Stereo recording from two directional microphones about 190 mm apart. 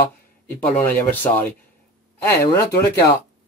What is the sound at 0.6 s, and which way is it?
Speech, 10° left (ahead or behind).